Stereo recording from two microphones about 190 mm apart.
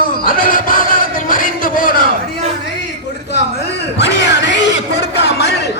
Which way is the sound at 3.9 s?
65° left (ahead or behind).